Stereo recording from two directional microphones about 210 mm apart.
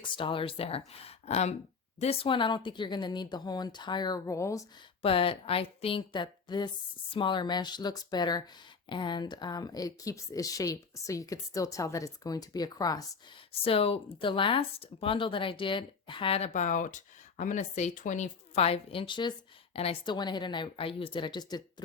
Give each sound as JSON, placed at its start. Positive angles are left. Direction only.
{"t": 0.0, "sound": "speech", "side_deg": 25}
{"t": 5.0, "sound": "speech", "side_deg": 25}